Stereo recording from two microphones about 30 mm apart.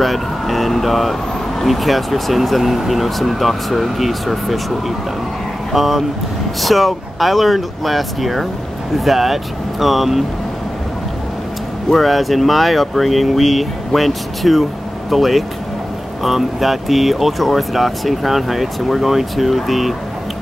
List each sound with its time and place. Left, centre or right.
0.0 s speech: centre
11.9 s speech: centre